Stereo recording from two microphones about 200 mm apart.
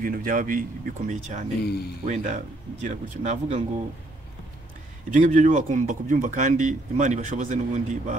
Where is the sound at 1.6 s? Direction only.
55° left (ahead or behind).